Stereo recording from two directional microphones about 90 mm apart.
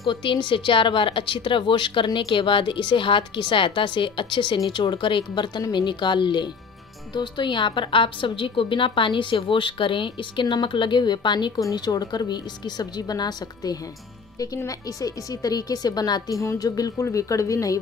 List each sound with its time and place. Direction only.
0.1 s a woman's voice: 65° left (ahead or behind); by 17.7 s 40° left (ahead or behind)